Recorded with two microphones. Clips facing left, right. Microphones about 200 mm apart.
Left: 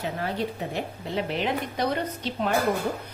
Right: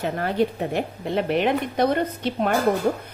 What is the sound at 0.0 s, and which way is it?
Speech, 55° right (ahead or behind).